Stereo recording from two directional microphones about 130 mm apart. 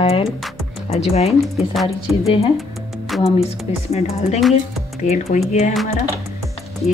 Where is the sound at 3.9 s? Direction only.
55° left (ahead or behind).